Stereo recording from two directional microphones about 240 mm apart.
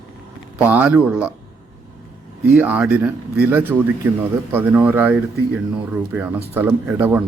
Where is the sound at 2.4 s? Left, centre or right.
Centre.